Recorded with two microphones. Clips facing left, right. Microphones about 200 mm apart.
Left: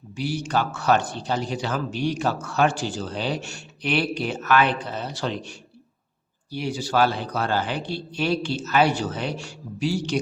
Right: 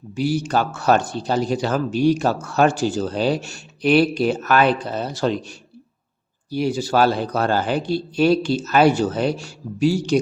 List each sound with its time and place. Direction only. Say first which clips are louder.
0.2 s speech: right 5 dB; 40° right (ahead or behind)